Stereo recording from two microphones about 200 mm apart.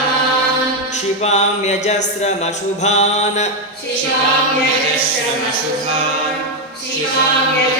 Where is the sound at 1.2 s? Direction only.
35° left (ahead or behind).